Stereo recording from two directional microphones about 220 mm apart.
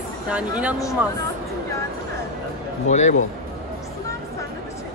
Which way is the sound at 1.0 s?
5° right (ahead or behind).